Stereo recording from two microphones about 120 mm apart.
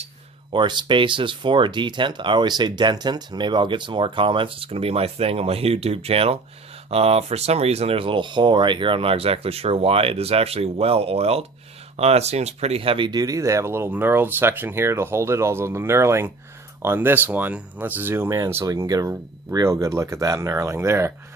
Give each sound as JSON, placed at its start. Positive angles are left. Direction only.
{"t": 0.5, "sound": "speech", "side_deg": -40}
{"t": 13.1, "sound": "speech", "side_deg": -30}